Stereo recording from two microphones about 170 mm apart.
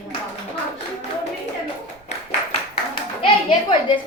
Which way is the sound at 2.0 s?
35° left (ahead or behind).